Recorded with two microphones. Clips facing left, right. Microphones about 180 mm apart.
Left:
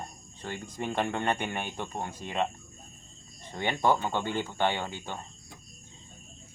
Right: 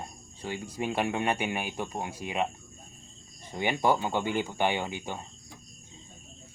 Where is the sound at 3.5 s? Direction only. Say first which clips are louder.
Even; 10° right (ahead or behind).